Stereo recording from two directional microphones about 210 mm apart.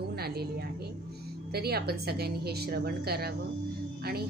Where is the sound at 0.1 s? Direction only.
50° right (ahead or behind).